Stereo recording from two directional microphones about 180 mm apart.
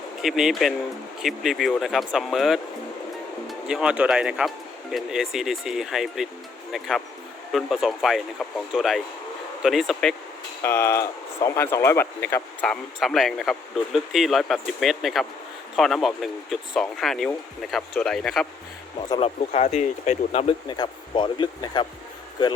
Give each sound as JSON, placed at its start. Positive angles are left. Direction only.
{"t": 0.2, "sound": "speech", "side_deg": 0}
{"t": 10.6, "sound": "speech", "side_deg": 15}
{"t": 19.2, "sound": "speech", "side_deg": 35}
{"t": 20.7, "sound": "speech", "side_deg": 25}